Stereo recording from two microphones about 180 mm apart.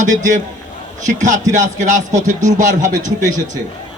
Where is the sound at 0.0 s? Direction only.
45° right (ahead or behind).